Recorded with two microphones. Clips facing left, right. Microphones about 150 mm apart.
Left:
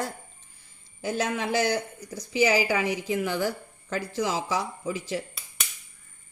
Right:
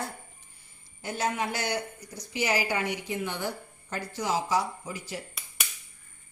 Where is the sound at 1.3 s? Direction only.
90° left.